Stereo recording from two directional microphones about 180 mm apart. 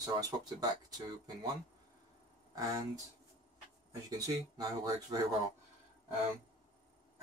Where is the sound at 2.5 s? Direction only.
20° right (ahead or behind).